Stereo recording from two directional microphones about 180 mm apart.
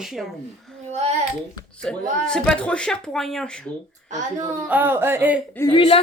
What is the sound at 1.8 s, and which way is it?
Speech, 5° left (ahead or behind).